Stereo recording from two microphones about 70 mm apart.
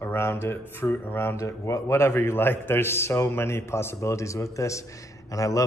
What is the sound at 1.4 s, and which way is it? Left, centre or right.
A man's voice, left.